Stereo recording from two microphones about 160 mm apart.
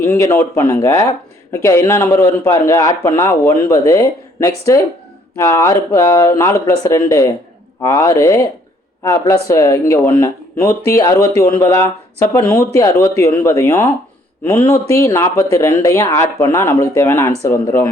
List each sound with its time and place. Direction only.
0.0 s a man's voice: 15° left (ahead or behind)